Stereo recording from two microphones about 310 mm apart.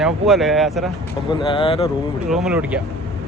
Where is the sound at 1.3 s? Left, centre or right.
Centre.